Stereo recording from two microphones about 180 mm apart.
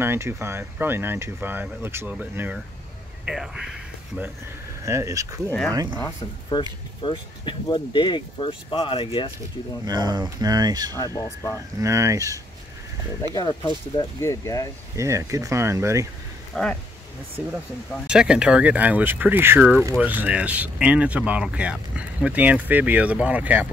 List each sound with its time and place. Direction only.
0.0 s speech: 15° right (ahead or behind)
4.8 s speech: 15° right (ahead or behind)
5.9 s speech: 20° left (ahead or behind)
9.8 s speech: 25° right (ahead or behind)
11.0 s speech: 15° left (ahead or behind)
11.5 s speech: 15° right (ahead or behind)
13.3 s speech: 20° left (ahead or behind)
15.0 s speech: 15° right (ahead or behind)
16.5 s speech: 5° left (ahead or behind)
18.0 s speech: 5° right (ahead or behind)